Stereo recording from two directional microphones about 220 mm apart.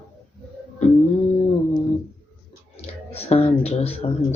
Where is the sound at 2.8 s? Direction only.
25° left (ahead or behind).